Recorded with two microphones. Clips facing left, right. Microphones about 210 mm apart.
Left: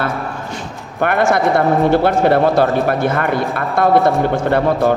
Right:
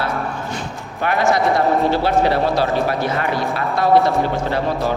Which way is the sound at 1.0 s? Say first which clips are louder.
Left 3 dB; 55° left (ahead or behind).